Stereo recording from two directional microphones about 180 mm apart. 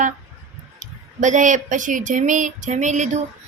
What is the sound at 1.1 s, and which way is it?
Speech, 45° right (ahead or behind).